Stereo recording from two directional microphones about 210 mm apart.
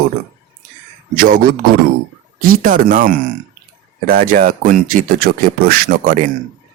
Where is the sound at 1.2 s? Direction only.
45° right (ahead or behind).